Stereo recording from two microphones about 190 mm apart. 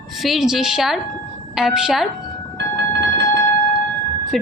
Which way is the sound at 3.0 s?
70° right (ahead or behind).